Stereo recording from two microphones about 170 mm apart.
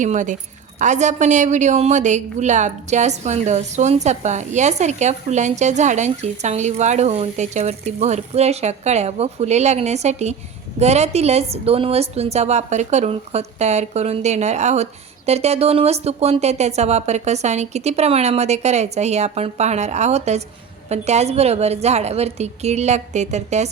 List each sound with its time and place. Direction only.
0.0 s a woman's voice: 45° right (ahead or behind)